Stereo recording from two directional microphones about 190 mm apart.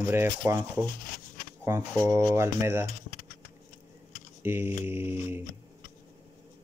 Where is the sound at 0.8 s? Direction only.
45° left (ahead or behind).